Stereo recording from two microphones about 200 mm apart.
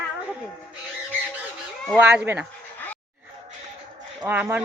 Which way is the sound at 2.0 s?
5° right (ahead or behind).